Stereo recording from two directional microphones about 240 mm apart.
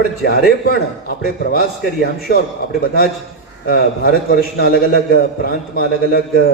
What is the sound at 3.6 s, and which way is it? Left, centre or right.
A man's voice, left.